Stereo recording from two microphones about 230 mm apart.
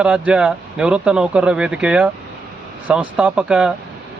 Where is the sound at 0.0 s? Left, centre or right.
Centre.